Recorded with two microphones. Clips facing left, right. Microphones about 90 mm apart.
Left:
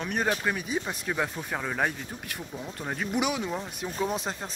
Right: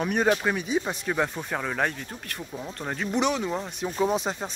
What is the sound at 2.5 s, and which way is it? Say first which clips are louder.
Speech: right 3 dB; 10° right (ahead or behind).